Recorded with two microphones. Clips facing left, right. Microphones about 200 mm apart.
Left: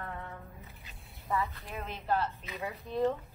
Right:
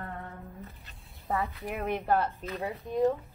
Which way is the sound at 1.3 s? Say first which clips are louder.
Right 3 dB; 60° right (ahead or behind).